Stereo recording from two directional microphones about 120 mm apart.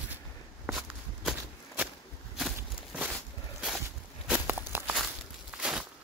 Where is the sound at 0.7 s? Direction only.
5° right (ahead or behind).